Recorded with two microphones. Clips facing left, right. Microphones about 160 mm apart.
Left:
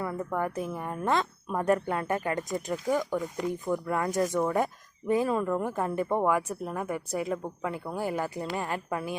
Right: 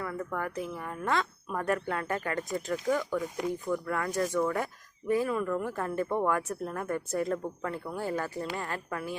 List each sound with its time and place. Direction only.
0.0 s speech: 20° left (ahead or behind)
5.6 s speech: 20° left (ahead or behind)